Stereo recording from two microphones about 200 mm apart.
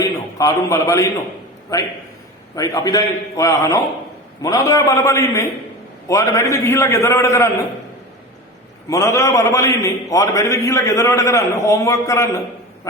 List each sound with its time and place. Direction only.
0.0 s a man's voice: 15° left (ahead or behind)
8.9 s a man's voice: 15° left (ahead or behind)